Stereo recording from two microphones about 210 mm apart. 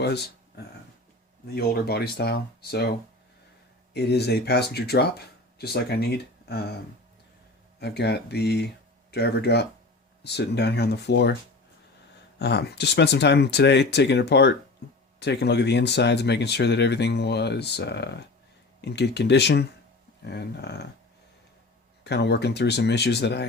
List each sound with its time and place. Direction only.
0.0 s a sound: 50° left (ahead or behind)
1.5 s speech: 50° left (ahead or behind)
3.9 s speech: 50° left (ahead or behind)
7.8 s speech: 50° left (ahead or behind)
12.4 s speech: 50° left (ahead or behind)
22.0 s speech: 55° left (ahead or behind)